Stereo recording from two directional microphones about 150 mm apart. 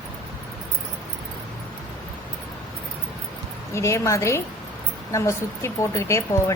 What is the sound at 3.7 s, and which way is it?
A woman's voice, 20° left (ahead or behind).